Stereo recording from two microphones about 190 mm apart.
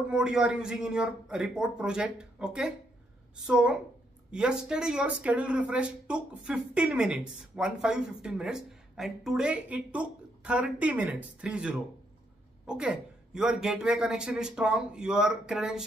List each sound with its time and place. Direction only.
0.1 s speech: 5° right (ahead or behind)